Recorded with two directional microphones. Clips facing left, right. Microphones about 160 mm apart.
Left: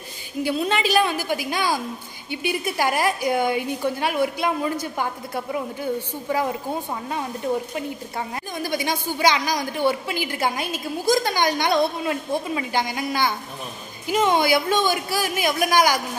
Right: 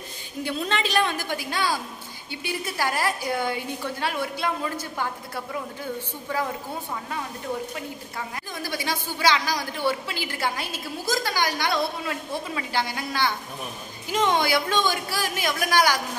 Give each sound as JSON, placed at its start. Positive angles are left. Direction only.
{"t": 0.4, "sound": "a woman's voice", "side_deg": 5}
{"t": 8.6, "sound": "a woman's voice", "side_deg": 20}